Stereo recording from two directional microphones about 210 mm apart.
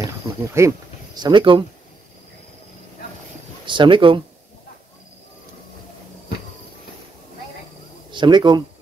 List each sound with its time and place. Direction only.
0.0 s a sound: 15° right (ahead or behind)
3.6 s speech: 25° right (ahead or behind)
8.1 s speech: 20° right (ahead or behind)